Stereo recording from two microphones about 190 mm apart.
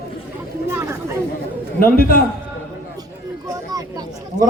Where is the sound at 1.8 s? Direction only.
50° left (ahead or behind).